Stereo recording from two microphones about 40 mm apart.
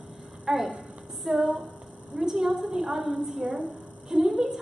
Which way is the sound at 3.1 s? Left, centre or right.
Right.